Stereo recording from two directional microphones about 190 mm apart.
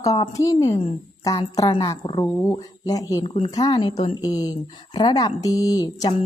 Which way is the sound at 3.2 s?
30° left (ahead or behind).